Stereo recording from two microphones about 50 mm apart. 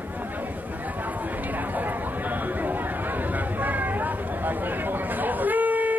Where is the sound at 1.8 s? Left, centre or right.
Right.